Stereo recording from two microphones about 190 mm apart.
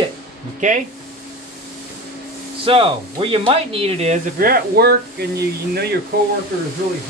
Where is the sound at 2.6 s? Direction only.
30° right (ahead or behind).